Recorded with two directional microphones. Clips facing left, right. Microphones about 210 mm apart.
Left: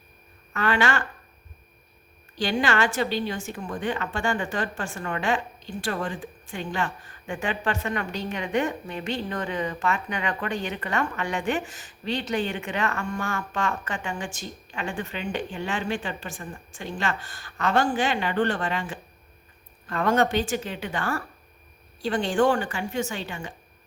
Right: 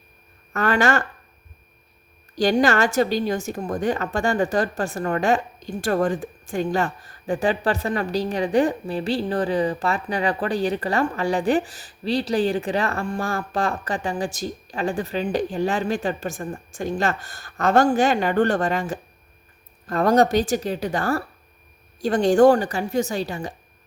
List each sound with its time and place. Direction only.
0.5 s speech: 45° right (ahead or behind)
2.3 s a woman's voice: 40° right (ahead or behind)